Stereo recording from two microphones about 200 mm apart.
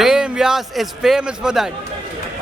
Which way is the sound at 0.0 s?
Centre (ahead or behind).